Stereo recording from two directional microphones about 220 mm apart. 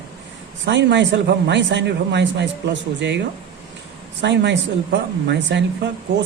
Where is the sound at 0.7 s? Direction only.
55° right (ahead or behind).